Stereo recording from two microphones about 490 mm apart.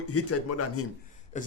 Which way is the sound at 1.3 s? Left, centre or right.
Centre.